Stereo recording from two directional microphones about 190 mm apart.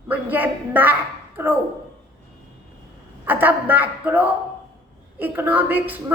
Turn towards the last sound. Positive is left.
turn(degrees=-10)  # may be behind; listen again after turning